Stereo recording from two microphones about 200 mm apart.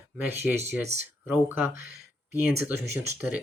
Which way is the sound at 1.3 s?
10° right (ahead or behind).